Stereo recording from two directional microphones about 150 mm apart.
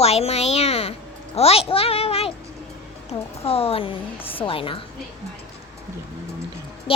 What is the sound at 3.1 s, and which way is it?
A woman's voice, 40° left (ahead or behind).